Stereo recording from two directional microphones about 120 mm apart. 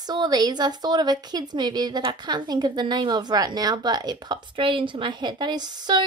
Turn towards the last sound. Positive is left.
turn(degrees=-35)  # may be behind; listen again after turning